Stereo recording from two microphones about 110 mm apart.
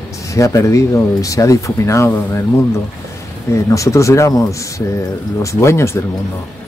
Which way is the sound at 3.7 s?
30° left (ahead or behind).